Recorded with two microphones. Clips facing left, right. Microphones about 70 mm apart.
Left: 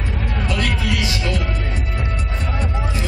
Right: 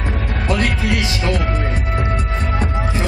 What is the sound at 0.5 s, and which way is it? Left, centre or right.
Music, right.